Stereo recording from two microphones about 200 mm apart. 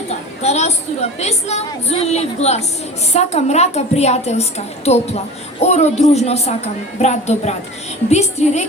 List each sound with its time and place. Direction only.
0.4 s a woman's voice: 35° left (ahead or behind)